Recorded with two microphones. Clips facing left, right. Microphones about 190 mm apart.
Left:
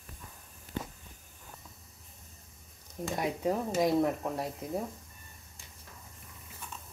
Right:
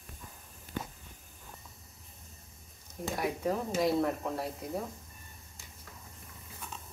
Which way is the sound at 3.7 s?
15° left (ahead or behind).